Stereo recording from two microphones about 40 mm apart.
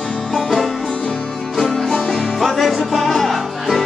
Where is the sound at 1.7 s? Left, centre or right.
Centre.